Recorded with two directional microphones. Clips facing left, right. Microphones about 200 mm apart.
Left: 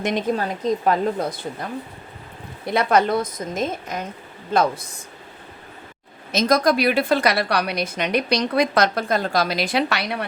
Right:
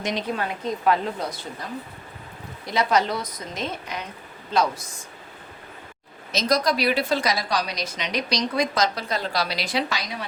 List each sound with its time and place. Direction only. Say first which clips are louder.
0.0 s a woman's voice: left 5 dB; 50° left (ahead or behind)
2.6 s a woman's voice: left 4 dB; 55° left (ahead or behind)
4.5 s a woman's voice: left 3 dB; 55° left (ahead or behind)
6.3 s a woman's voice: left 4 dB; 50° left (ahead or behind)